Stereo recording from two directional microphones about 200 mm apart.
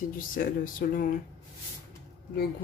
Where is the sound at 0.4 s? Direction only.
45° left (ahead or behind).